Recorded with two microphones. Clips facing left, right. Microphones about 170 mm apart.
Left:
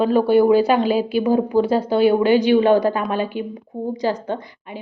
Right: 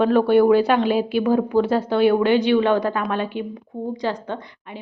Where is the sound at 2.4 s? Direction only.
40° left (ahead or behind).